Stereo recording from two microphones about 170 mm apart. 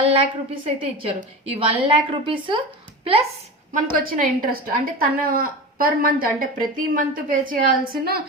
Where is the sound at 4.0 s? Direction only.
55° right (ahead or behind).